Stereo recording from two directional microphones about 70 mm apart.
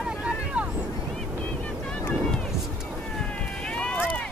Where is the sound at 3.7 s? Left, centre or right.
Centre.